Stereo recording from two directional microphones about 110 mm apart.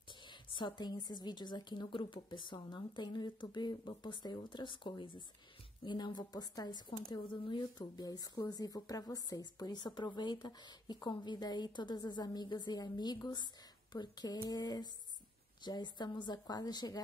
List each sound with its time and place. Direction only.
0.1 s a woman's voice: 45° left (ahead or behind)